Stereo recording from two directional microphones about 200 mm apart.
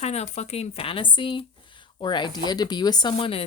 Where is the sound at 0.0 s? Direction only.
35° left (ahead or behind).